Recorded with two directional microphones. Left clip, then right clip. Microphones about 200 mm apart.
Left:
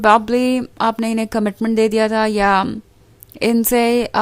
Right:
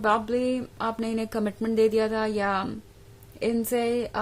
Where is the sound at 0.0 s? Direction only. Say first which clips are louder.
Left 11 dB; 45° left (ahead or behind).